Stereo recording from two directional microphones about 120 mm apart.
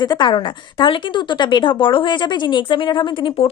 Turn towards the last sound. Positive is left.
turn(degrees=40)  # may be behind; listen again after turning